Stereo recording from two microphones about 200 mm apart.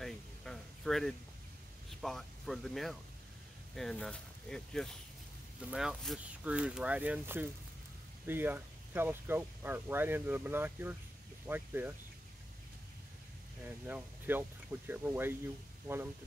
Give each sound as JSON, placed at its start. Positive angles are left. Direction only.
{"t": 0.0, "sound": "a sound", "side_deg": 0}
{"t": 1.9, "sound": "speech", "side_deg": 0}
{"t": 13.7, "sound": "speech", "side_deg": -10}